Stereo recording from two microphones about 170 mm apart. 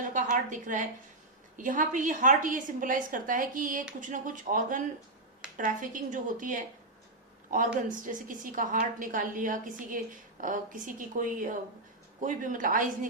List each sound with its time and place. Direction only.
0.0 s a woman's voice: 45° right (ahead or behind)